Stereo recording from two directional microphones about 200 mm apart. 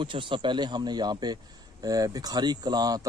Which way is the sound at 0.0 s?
25° right (ahead or behind).